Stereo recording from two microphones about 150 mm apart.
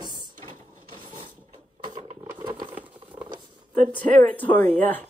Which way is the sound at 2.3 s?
30° right (ahead or behind).